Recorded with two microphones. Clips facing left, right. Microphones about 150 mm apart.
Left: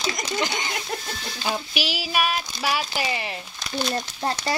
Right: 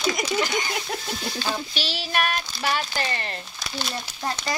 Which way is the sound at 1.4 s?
10° left (ahead or behind).